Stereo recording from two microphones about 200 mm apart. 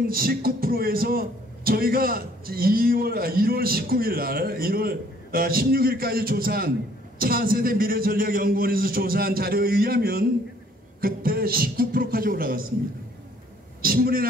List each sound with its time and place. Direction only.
0.0 s a man's voice: 45° right (ahead or behind)
13.8 s a man's voice: 50° right (ahead or behind)